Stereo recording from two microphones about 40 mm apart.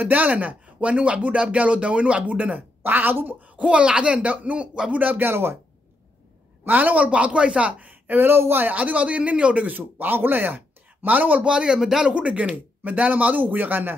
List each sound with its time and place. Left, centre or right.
0.0 s speech: right
0.7 s speech: right
2.8 s a woman's voice: right
3.5 s speech: right
4.9 s speech: right
5.2 s speech: right
6.6 s speech: right
8.2 s speech: right
8.7 s speech: right
9.8 s speech: right
11.4 s speech: right
11.8 s speech: centre
12.1 s speech: right